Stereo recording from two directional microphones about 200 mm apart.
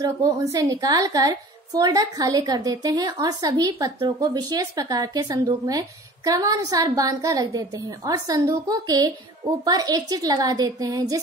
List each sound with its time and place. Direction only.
0.0 s a woman's voice: 15° right (ahead or behind)